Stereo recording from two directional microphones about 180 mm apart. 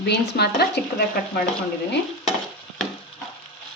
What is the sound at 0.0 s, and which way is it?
Speech, 65° left (ahead or behind).